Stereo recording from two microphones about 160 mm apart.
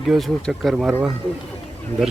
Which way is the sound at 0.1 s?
Centre (ahead or behind).